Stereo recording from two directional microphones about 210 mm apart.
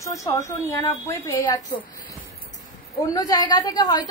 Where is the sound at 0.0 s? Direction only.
15° left (ahead or behind).